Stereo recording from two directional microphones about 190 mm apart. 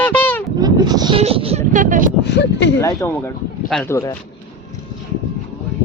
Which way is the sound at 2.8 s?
15° left (ahead or behind).